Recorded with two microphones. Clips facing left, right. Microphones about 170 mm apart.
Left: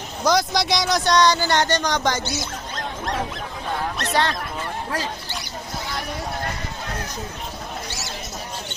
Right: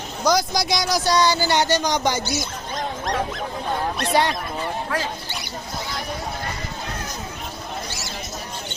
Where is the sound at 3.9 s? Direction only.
10° right (ahead or behind).